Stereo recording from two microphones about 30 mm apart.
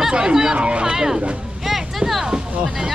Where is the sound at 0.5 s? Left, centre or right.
Right.